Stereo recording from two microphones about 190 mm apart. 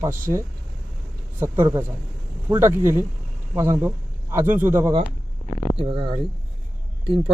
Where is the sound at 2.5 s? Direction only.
15° right (ahead or behind).